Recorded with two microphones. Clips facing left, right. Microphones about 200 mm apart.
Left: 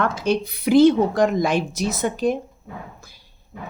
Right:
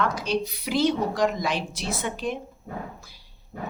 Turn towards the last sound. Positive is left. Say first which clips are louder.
# right 2 dB
turn(degrees=-45)  # may be behind; listen again after turning